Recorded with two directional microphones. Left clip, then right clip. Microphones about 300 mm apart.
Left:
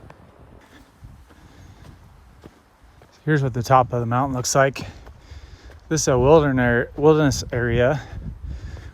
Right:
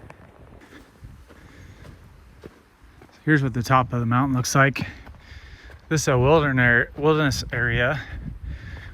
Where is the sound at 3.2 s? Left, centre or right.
Centre.